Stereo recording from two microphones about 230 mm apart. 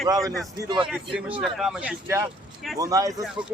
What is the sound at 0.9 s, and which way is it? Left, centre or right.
Speech, centre.